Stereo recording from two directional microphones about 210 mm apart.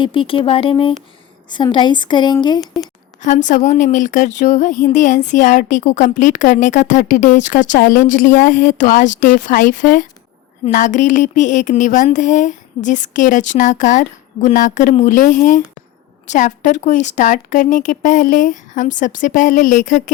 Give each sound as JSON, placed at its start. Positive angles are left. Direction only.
{"t": 0.0, "sound": "speech", "side_deg": 25}
{"t": 3.2, "sound": "speech", "side_deg": 35}